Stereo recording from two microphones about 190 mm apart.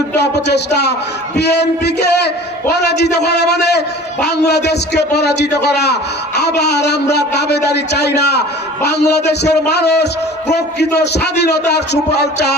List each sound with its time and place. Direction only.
0.2 s a man's voice: 60° left (ahead or behind)